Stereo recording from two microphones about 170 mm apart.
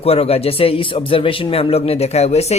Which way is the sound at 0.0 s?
35° left (ahead or behind).